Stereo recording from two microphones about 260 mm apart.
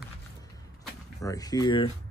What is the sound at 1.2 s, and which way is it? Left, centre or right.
Speech, centre.